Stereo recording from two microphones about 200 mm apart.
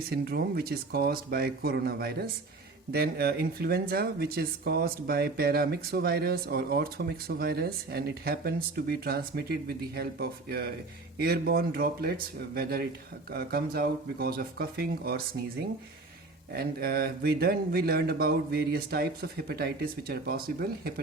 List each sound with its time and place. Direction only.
0.1 s speech: 50° right (ahead or behind)
16.5 s speech: 50° right (ahead or behind)